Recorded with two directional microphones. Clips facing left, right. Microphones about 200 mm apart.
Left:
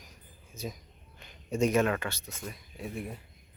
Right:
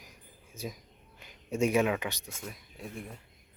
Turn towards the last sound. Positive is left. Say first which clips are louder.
# left 4 dB
turn(degrees=5)  # may be behind; listen again after turning